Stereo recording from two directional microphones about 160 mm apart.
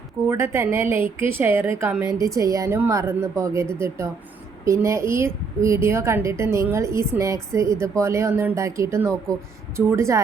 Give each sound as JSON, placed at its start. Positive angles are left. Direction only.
{"t": 0.3, "sound": "a woman's voice", "side_deg": -15}